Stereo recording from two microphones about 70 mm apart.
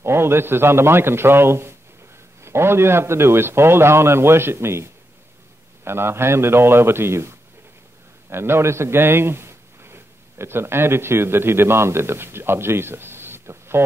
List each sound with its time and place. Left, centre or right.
0.0 s a man's voice: right
5.9 s a man's voice: right